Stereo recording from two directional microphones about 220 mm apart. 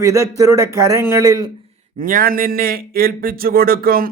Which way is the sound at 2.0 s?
40° right (ahead or behind).